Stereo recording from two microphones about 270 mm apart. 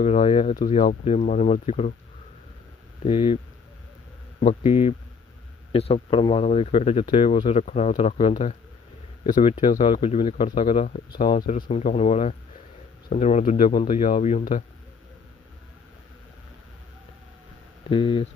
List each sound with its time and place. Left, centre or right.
0.0 s speech: left
3.0 s speech: centre
4.4 s speech: left
17.9 s speech: centre